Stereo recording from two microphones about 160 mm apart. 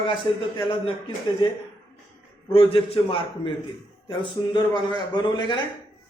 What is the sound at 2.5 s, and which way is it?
A man's voice, 35° left (ahead or behind).